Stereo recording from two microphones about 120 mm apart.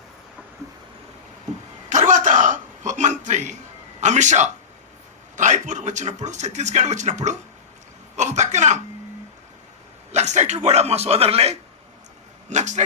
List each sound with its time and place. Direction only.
1.9 s a sound: 90° right
4.0 s a man's voice: 80° right
5.4 s a man's voice: 90° right; by 8.8 s 75° right (ahead or behind)
10.1 s a man's voice: 75° right (ahead or behind); by 11.5 s 55° right (ahead or behind)
12.5 s speech: 80° right